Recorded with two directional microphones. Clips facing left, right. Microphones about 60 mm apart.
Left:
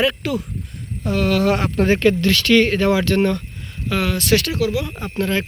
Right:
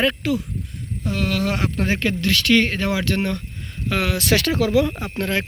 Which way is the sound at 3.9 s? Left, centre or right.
Right.